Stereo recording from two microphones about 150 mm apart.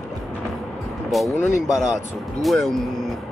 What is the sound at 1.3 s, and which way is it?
Speech, 15° left (ahead or behind).